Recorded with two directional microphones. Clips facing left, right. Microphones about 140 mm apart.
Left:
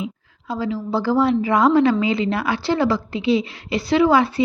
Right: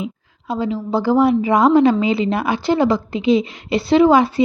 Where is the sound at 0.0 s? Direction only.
20° right (ahead or behind).